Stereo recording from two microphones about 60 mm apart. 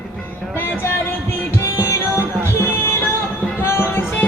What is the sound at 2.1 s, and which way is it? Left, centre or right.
Music, left.